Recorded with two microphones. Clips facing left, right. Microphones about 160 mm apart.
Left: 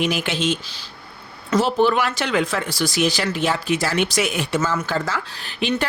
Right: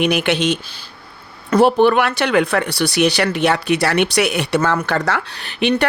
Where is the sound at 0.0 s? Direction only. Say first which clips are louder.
Right 5 dB; 70° right (ahead or behind).